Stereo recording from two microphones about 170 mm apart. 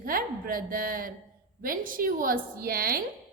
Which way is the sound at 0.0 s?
55° right (ahead or behind).